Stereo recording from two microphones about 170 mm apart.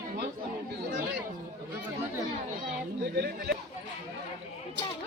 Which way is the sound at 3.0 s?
70° right (ahead or behind).